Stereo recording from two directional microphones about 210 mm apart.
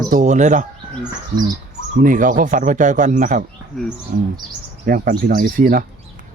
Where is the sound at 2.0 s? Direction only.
40° right (ahead or behind).